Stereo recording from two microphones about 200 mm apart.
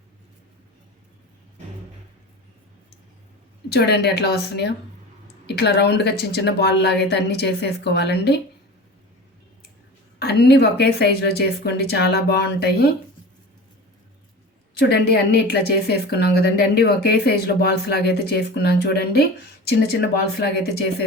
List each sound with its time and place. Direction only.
3.7 s speech: 55° left (ahead or behind)
10.2 s speech: 55° left (ahead or behind)
14.8 s speech: 55° left (ahead or behind)